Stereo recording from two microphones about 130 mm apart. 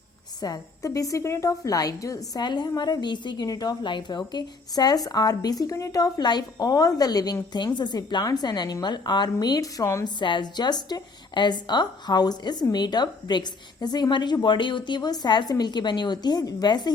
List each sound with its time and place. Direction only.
0.4 s a woman's voice: 25° left (ahead or behind)
10.2 s speech: 35° left (ahead or behind)